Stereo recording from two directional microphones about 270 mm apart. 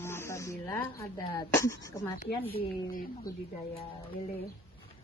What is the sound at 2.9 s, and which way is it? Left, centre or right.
Speech, left.